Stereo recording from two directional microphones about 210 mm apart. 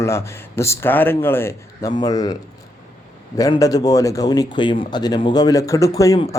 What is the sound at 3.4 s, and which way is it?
Speech, 15° left (ahead or behind).